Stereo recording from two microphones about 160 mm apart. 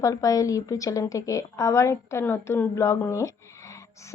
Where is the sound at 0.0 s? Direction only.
20° left (ahead or behind).